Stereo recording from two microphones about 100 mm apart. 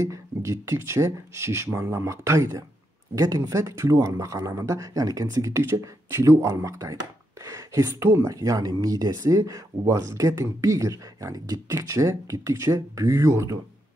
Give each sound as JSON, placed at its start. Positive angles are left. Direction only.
{"t": 0.0, "sound": "speech", "side_deg": -30}